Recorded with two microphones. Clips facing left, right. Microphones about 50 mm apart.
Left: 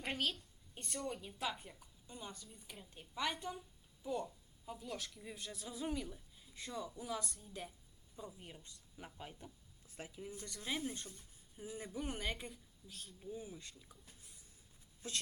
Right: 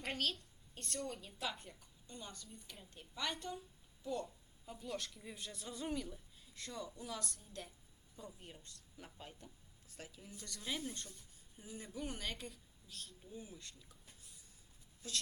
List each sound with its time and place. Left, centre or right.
0.0 s a woman's voice: centre
1.4 s a woman's voice: centre
15.0 s a woman's voice: left